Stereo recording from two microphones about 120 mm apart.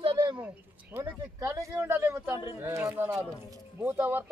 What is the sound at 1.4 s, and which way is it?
A man's voice, 25° right (ahead or behind).